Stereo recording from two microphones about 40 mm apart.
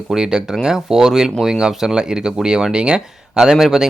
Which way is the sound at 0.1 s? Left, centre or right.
Centre.